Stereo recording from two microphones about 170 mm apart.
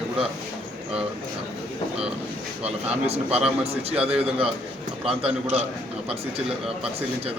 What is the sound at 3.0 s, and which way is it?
A man's voice, 35° right (ahead or behind).